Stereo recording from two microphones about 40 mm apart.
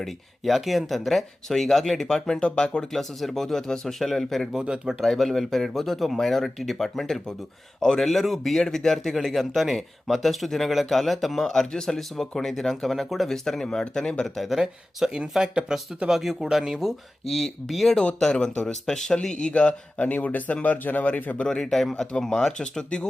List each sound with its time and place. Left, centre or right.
0.0 s a man's voice: centre
2.9 s a man's voice: centre
4.6 s speech: right
4.9 s a man's voice: centre
14.3 s a man's voice: centre
14.9 s speech: centre
16.0 s a man's voice: centre
18.2 s speech: centre
19.3 s speech: left
20.0 s speech: left
21.4 s speech: centre